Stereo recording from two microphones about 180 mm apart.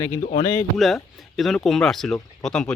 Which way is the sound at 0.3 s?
25° left (ahead or behind).